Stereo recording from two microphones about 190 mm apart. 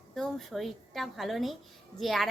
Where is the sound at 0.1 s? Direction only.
Centre (ahead or behind).